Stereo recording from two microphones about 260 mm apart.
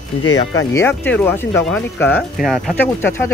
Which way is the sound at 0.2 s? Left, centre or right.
Left.